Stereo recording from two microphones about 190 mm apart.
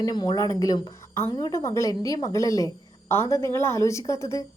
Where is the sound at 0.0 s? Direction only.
20° left (ahead or behind).